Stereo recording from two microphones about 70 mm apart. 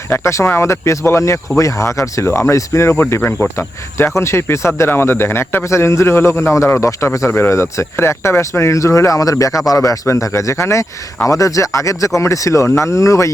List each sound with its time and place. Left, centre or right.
0.1 s speech: left
3.0 s speech: left
3.9 s speech: left
7.3 s speech: left